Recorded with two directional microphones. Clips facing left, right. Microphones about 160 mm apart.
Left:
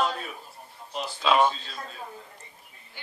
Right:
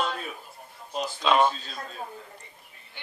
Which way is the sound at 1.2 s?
Centre (ahead or behind).